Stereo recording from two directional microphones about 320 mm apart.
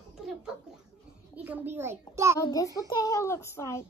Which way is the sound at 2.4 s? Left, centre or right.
Centre.